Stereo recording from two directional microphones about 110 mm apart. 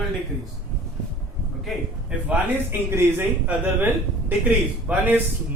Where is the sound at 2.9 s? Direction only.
25° right (ahead or behind).